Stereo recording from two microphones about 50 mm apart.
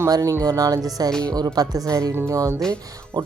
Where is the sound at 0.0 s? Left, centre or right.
Right.